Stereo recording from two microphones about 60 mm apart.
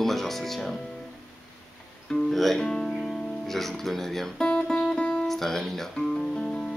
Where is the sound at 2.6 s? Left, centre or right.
Centre.